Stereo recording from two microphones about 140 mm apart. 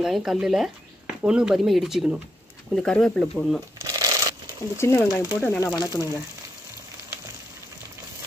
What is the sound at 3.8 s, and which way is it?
Shuffling cards, 25° right (ahead or behind).